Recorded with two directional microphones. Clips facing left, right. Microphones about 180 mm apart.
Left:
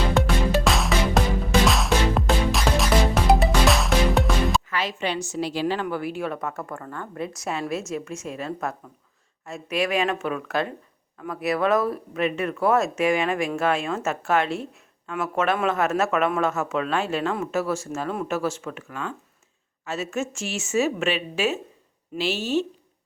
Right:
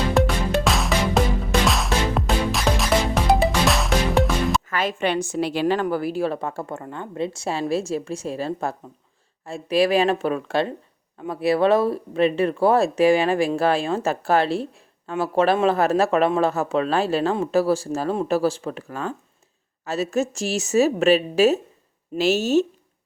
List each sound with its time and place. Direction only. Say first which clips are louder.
0.1 s music: right 1 dB; centre (ahead or behind)
4.7 s a woman's voice: right 4 dB; 50° right (ahead or behind)
5.8 s a woman's voice: right 5 dB; 35° right (ahead or behind)